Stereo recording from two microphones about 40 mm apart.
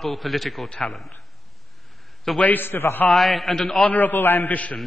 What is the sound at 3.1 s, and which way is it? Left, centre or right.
Speech, centre.